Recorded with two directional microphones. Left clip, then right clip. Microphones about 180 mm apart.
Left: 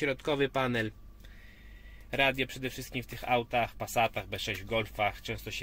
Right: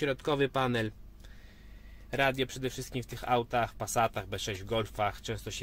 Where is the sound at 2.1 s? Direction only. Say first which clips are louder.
Left 1 dB; 10° right (ahead or behind).